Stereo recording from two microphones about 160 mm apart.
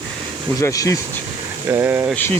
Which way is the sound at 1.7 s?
15° right (ahead or behind).